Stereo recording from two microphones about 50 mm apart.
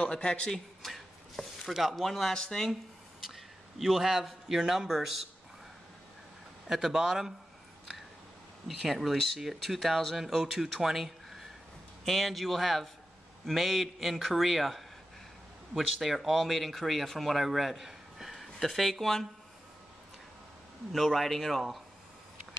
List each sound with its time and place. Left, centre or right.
0.0 s speech: centre
0.8 s a sound: centre
1.7 s speech: centre
3.3 s a man's voice: centre
6.7 s speech: centre
8.6 s speech: centre
20.9 s speech: centre